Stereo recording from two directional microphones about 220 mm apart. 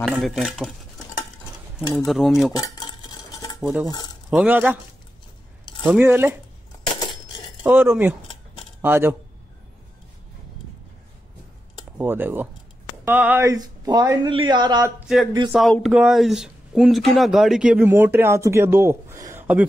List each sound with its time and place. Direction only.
0.0 s speech: centre (ahead or behind)
2.0 s speech: centre (ahead or behind)
2.5 s cutlery: 20° left (ahead or behind)
3.6 s speech: 10° right (ahead or behind)
5.9 s speech: 10° right (ahead or behind)
7.6 s speech: 10° right (ahead or behind)
12.0 s speech: 10° right (ahead or behind)
15.1 s speech: centre (ahead or behind)